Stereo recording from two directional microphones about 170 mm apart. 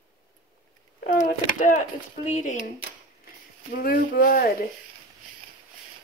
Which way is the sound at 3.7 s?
60° left (ahead or behind).